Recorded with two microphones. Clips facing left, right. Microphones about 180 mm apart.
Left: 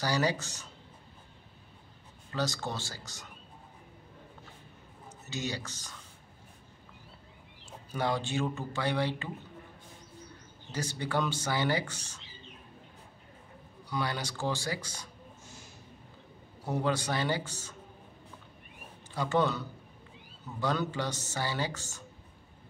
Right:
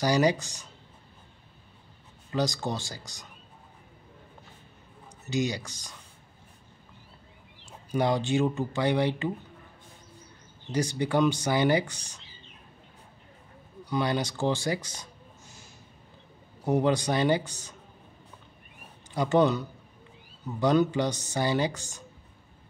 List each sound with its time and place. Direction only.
0.0 s speech: 15° right (ahead or behind)
2.3 s speech: 15° right (ahead or behind)
5.3 s speech: 15° right (ahead or behind)
7.9 s speech: 15° right (ahead or behind)
10.7 s speech: 15° right (ahead or behind)
13.8 s speech: 20° right (ahead or behind)
16.6 s speech: 20° right (ahead or behind)
19.1 s speech: 15° right (ahead or behind)
20.6 s speech: 20° right (ahead or behind)